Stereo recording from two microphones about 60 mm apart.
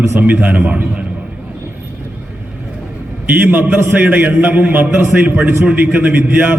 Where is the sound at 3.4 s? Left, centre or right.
Right.